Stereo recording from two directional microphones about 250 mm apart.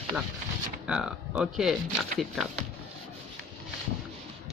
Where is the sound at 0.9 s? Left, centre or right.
Centre.